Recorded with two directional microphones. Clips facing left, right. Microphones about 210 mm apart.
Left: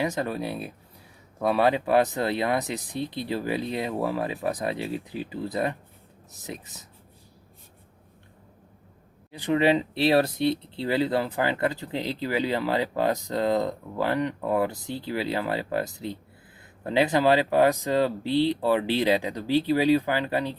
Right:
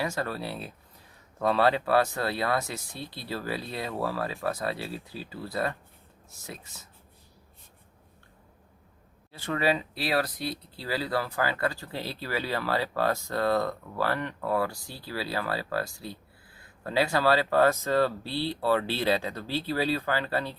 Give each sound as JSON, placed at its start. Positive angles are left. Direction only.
{"t": 0.0, "sound": "speech", "side_deg": 20}
{"t": 9.3, "sound": "speech", "side_deg": 15}